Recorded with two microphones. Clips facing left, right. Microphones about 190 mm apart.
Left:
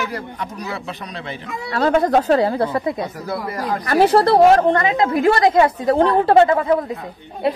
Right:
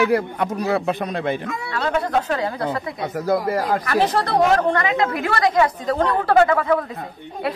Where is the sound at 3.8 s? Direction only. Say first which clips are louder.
Left 6 dB; 30° left (ahead or behind).